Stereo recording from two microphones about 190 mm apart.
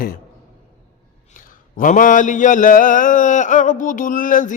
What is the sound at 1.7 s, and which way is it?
Mantra, 45° left (ahead or behind).